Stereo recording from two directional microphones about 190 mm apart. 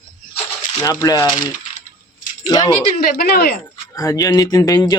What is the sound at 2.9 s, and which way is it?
Speech, 50° left (ahead or behind).